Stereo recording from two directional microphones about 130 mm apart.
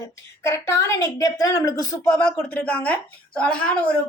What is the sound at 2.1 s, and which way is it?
A woman's voice, 10° left (ahead or behind).